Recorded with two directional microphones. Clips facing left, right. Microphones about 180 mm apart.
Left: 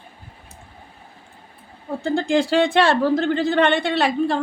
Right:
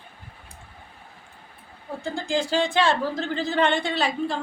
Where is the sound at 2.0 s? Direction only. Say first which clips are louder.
Left 7 dB; 65° left (ahead or behind).